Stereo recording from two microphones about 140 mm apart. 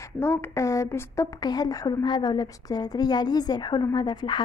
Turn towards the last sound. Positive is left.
turn(degrees=30)  # may be behind; listen again after turning